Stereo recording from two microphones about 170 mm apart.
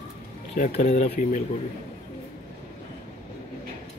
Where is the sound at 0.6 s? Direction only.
45° left (ahead or behind).